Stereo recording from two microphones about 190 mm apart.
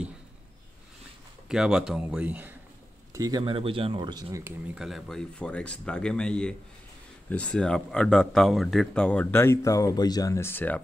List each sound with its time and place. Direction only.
1.5 s a man's voice: 5° right (ahead or behind); by 4.6 s 20° right (ahead or behind)
4.7 s speech: centre (ahead or behind)